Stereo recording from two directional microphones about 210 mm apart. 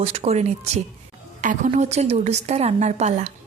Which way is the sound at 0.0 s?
30° right (ahead or behind).